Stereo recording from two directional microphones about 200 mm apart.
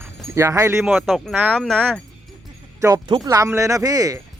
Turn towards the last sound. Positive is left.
turn(degrees=-15)  # may be behind; listen again after turning